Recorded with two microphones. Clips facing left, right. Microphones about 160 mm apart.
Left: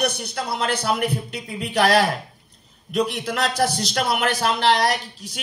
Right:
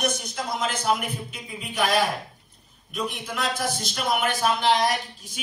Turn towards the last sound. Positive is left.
turn(degrees=75)  # may be behind; listen again after turning